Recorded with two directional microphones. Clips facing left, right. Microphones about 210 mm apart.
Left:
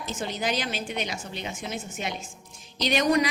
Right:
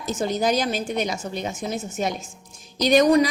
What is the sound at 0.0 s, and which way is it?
A woman's voice, 40° right (ahead or behind).